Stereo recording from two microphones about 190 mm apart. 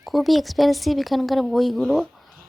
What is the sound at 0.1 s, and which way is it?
Speech, centre (ahead or behind).